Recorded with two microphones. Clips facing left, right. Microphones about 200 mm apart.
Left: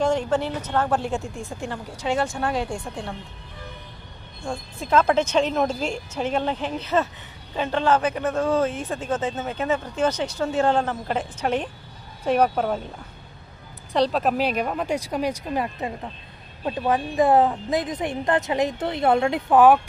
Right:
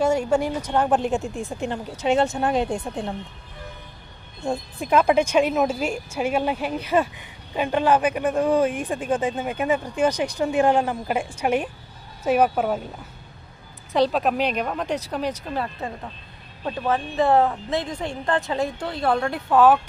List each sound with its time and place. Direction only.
0.0 s speech: 10° right (ahead or behind)
4.4 s a woman's voice: 20° right (ahead or behind)
13.9 s a woman's voice: centre (ahead or behind); by 19.8 s 15° left (ahead or behind)